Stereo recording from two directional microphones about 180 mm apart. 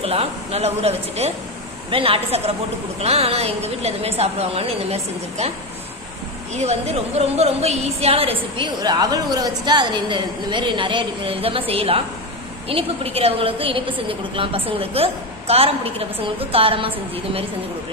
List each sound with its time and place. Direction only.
0.0 s a woman's voice: 35° right (ahead or behind)
6.5 s a woman's voice: 35° right (ahead or behind)
8.5 s a woman's voice: 25° right (ahead or behind)